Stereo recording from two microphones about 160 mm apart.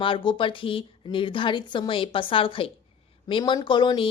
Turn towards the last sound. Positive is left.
turn(degrees=30)  # may be behind; listen again after turning